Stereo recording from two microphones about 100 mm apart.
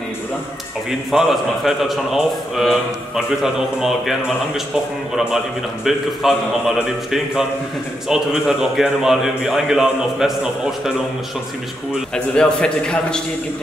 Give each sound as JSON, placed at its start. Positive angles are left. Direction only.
{"t": 1.1, "sound": "a man's voice", "side_deg": -5}
{"t": 5.9, "sound": "a man's voice", "side_deg": -5}
{"t": 8.1, "sound": "a man's voice", "side_deg": -5}
{"t": 12.4, "sound": "a man's voice", "side_deg": 10}